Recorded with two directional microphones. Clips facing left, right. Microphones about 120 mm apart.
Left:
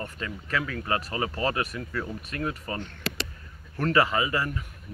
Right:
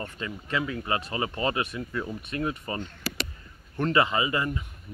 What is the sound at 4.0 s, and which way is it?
Speech, 5° right (ahead or behind).